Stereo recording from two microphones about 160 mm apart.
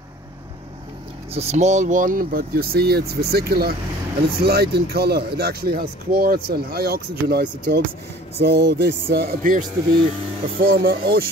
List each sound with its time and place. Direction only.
1.3 s speech: 40° right (ahead or behind); by 9.7 s 55° right (ahead or behind)
10.6 s speech: 65° right (ahead or behind)